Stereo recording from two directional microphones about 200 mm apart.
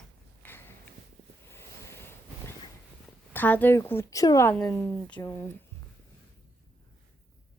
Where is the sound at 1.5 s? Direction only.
10° left (ahead or behind).